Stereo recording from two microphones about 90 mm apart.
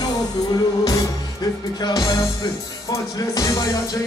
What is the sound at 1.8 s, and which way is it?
Music, 50° left (ahead or behind).